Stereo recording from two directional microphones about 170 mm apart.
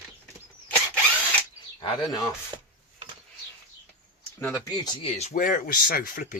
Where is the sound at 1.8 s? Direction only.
25° left (ahead or behind).